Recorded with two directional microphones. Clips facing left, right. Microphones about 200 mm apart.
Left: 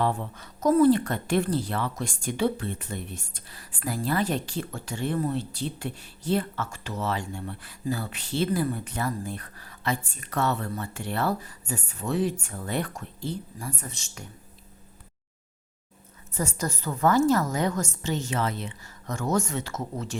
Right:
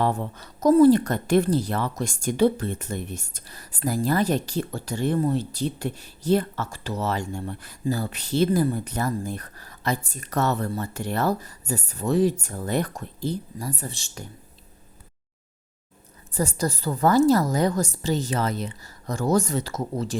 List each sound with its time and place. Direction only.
0.0 s a woman's voice: 40° right (ahead or behind)
16.3 s a woman's voice: 35° right (ahead or behind)